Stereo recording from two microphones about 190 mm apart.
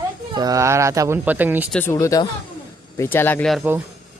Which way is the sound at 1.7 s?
10° left (ahead or behind).